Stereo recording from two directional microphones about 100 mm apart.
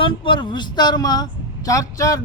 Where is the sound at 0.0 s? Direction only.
60° left (ahead or behind).